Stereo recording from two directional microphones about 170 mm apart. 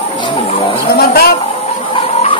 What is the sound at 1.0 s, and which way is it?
Speech, 65° left (ahead or behind).